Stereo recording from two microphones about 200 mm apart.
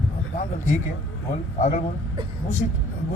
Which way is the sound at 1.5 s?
35° left (ahead or behind).